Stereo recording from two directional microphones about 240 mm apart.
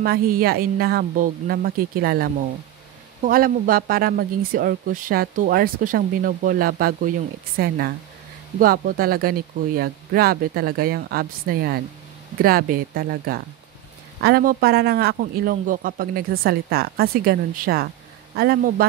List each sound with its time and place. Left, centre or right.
0.0 s speech: right